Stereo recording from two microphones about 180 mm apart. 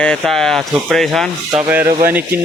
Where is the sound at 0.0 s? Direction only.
5° left (ahead or behind).